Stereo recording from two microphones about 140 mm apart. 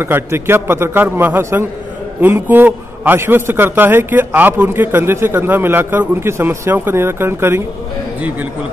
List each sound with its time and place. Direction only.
0.0 s a man's voice: 15° right (ahead or behind)